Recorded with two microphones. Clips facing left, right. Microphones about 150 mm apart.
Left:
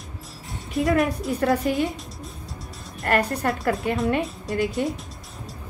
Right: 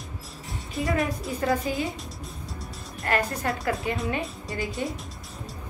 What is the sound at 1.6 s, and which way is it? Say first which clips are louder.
Speech: left 5 dB; centre (ahead or behind).